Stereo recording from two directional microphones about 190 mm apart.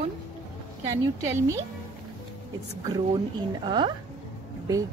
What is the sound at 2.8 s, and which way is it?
Speech, 20° right (ahead or behind).